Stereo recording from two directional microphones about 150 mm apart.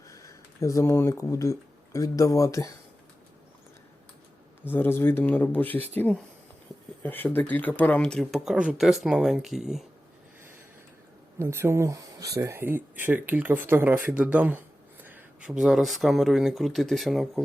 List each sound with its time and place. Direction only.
0.1 s speech: 20° left (ahead or behind)
4.6 s speech: 15° left (ahead or behind); by 9.8 s centre (ahead or behind)
11.3 s speech: 15° right (ahead or behind); by 17.4 s centre (ahead or behind)